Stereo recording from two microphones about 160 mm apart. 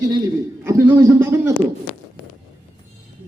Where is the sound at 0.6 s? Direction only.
20° right (ahead or behind).